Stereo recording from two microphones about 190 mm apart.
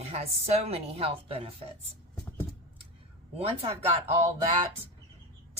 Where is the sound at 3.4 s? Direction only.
30° right (ahead or behind).